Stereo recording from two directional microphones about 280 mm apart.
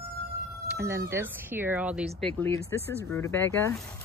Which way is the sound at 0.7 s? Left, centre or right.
Centre.